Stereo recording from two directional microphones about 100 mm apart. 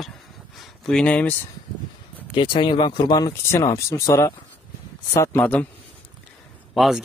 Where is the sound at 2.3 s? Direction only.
60° left (ahead or behind); by 5.6 s 20° left (ahead or behind).